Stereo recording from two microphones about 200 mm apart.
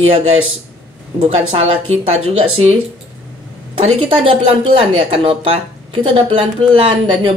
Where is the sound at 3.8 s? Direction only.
25° right (ahead or behind).